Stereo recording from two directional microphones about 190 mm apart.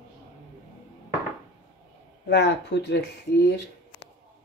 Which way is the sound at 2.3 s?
65° left (ahead or behind).